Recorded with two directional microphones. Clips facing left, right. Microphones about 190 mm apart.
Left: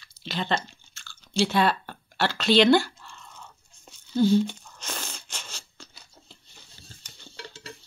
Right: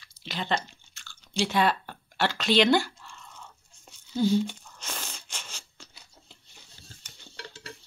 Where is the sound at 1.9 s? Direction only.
15° right (ahead or behind).